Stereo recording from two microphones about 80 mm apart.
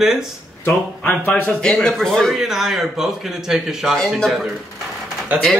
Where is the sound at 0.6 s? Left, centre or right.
Left.